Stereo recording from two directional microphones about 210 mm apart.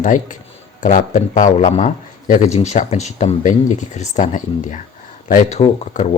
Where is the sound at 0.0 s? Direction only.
40° left (ahead or behind).